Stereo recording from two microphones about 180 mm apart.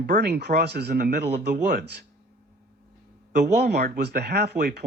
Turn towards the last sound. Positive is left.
turn(degrees=-65)  # may be behind; listen again after turning